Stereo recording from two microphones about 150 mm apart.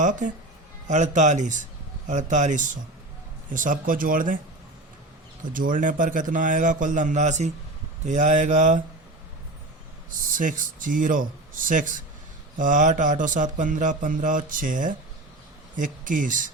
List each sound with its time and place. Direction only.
0.0 s music: 55° right (ahead or behind)
0.9 s speech: 55° right (ahead or behind)
2.0 s music: 55° right (ahead or behind)
5.5 s music: 60° right (ahead or behind)
10.1 s music: 60° right (ahead or behind)
15.7 s speech: 60° right (ahead or behind)